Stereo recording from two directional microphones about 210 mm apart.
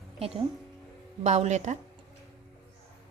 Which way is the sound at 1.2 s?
35° right (ahead or behind).